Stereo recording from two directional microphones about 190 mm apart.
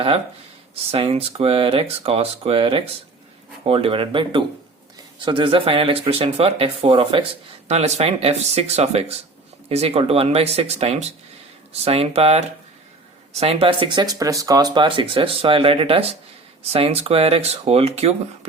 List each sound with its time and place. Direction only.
0.9 s speech: 30° right (ahead or behind)